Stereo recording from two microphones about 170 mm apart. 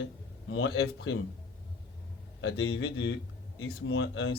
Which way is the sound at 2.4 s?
90° left.